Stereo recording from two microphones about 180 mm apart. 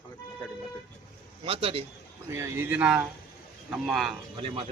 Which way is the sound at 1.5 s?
30° right (ahead or behind).